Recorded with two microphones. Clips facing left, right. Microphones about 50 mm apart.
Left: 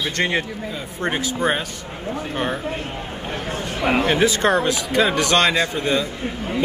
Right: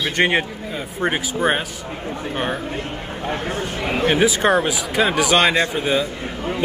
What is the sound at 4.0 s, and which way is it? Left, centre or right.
Speech, centre.